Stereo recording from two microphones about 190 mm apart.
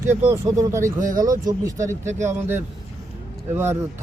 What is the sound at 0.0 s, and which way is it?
Speech, 15° right (ahead or behind).